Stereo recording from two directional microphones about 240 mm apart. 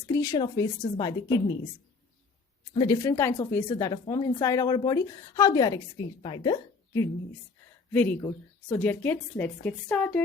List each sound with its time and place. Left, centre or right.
0.1 s speech: centre
2.7 s a woman's voice: centre